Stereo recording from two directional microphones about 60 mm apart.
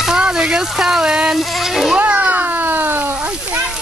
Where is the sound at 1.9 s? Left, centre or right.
Right.